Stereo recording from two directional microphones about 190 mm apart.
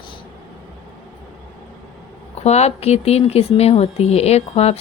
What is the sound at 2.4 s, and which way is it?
Speech, 35° left (ahead or behind).